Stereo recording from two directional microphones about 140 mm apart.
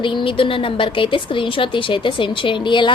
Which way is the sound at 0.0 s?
35° left (ahead or behind).